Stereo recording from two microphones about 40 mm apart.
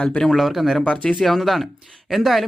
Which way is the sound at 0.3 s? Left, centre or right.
Centre.